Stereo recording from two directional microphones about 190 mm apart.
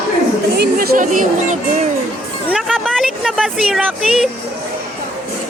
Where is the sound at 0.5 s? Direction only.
55° right (ahead or behind).